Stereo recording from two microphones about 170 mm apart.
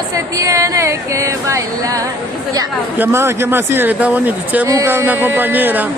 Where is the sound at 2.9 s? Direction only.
15° right (ahead or behind).